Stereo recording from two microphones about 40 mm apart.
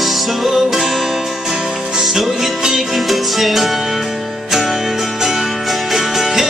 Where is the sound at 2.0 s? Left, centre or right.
Centre.